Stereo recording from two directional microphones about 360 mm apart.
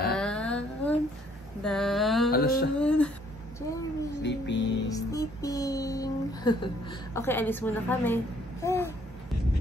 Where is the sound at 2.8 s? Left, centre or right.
Centre.